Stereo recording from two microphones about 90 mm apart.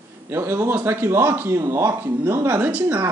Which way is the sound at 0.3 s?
25° right (ahead or behind).